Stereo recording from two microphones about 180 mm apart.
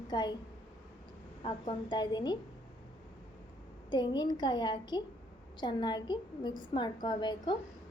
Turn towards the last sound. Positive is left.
turn(degrees=25)  # may be behind; listen again after turning